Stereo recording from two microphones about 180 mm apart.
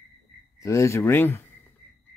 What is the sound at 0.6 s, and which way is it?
Speech, 15° left (ahead or behind).